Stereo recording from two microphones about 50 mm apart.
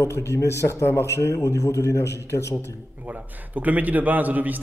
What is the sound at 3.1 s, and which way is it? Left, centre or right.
Speech, right.